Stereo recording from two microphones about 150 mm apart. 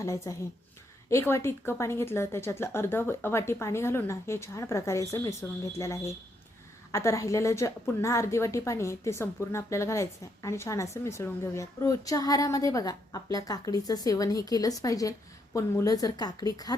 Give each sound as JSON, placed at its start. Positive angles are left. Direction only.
{"t": 0.0, "sound": "a woman's voice", "side_deg": 20}